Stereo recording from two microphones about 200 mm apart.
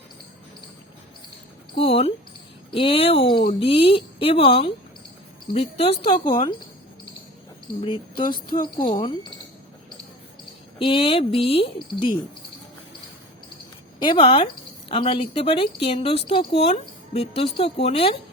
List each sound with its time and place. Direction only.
1.7 s speech: 30° left (ahead or behind)
7.8 s speech: 25° left (ahead or behind)
10.8 s speech: 25° left (ahead or behind)
14.0 s speech: 25° left (ahead or behind)